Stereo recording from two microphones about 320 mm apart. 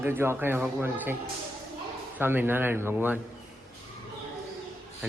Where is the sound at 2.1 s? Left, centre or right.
Centre.